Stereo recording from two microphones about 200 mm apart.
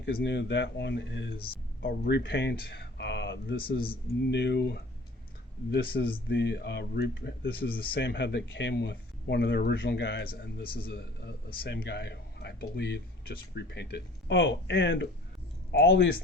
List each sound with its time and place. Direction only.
0.0 s speech: 60° left (ahead or behind)